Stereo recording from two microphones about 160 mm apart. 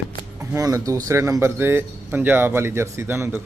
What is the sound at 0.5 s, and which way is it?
Speech, 20° right (ahead or behind).